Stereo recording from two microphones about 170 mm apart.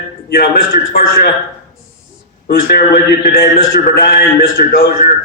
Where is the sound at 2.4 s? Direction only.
60° left (ahead or behind).